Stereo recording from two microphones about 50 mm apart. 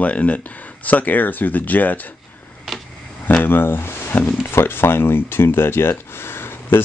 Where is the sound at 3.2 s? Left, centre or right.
Left.